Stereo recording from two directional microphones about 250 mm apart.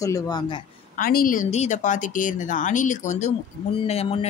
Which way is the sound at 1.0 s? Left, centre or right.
Left.